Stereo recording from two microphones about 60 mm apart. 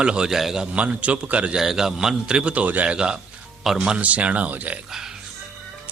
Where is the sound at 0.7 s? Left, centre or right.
Right.